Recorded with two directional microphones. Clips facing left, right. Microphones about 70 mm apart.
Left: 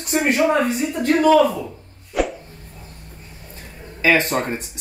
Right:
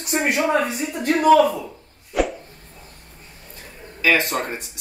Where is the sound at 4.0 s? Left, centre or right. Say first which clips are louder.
Left 2 dB; left.